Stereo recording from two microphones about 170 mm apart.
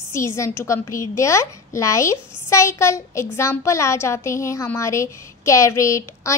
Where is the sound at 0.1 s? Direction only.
15° left (ahead or behind).